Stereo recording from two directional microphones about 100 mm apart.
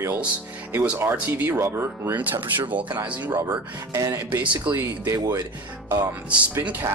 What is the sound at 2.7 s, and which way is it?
Speech, 50° right (ahead or behind).